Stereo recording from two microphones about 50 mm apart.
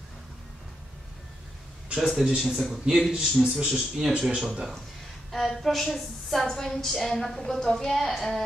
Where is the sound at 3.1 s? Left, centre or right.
Centre.